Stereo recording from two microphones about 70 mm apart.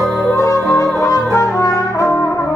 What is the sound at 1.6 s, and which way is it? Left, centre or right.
Brass instrument, left.